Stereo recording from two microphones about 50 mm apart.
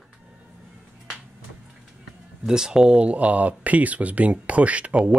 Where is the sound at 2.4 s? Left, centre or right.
Centre.